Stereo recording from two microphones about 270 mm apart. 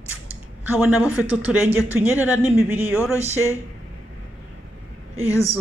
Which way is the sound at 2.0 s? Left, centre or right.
Centre.